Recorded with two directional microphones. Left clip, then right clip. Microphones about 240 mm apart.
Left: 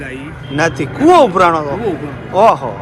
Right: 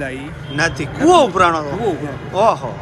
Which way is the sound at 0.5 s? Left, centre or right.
Centre.